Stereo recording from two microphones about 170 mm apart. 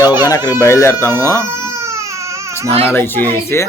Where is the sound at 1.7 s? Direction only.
15° right (ahead or behind).